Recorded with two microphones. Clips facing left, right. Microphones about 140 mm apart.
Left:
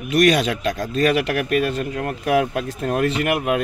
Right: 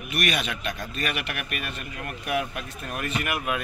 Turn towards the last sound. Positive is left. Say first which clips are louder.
# left 8 dB
turn(degrees=70)  # may be behind; listen again after turning